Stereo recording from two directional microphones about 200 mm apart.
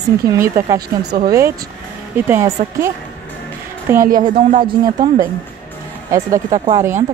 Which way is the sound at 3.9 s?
10° right (ahead or behind).